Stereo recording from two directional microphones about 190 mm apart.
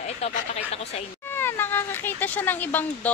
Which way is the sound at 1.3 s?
10° left (ahead or behind).